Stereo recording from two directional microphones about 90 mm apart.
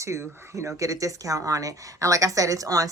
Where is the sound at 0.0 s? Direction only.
30° right (ahead or behind).